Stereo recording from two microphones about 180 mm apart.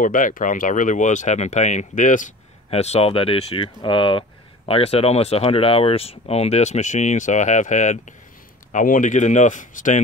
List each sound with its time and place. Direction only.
0.0 s speech: 50° left (ahead or behind)